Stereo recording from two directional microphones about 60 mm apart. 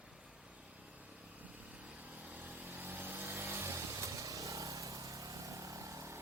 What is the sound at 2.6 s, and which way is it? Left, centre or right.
Vehicle, right.